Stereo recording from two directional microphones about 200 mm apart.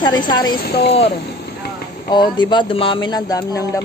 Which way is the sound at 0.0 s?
20° left (ahead or behind).